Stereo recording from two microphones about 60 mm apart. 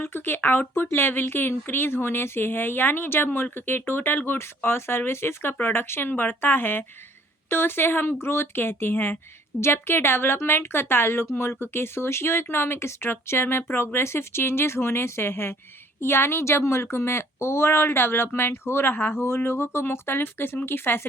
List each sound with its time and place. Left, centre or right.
0.0 s speech: left